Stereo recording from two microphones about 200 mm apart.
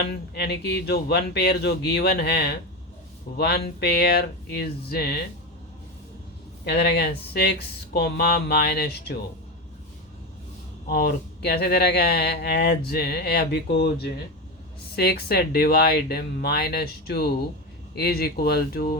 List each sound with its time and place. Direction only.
0.0 s speech: 55° left (ahead or behind)
6.7 s speech: 55° left (ahead or behind)
10.8 s speech: 50° left (ahead or behind)